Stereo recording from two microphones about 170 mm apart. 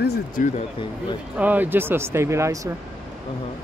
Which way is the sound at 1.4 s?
10° right (ahead or behind).